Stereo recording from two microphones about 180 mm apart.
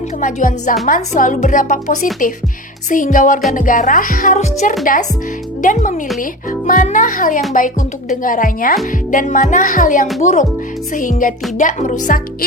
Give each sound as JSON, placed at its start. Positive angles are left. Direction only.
{"t": 0.2, "sound": "speech", "side_deg": 45}